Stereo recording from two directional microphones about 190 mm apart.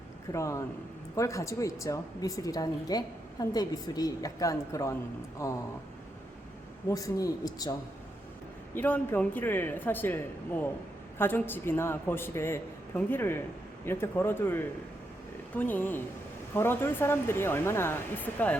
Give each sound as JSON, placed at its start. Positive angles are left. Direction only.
{"t": 0.3, "sound": "a woman's voice", "side_deg": 15}
{"t": 6.8, "sound": "a man's voice", "side_deg": 20}